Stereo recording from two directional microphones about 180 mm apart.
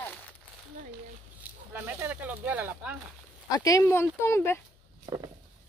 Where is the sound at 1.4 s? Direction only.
10° right (ahead or behind).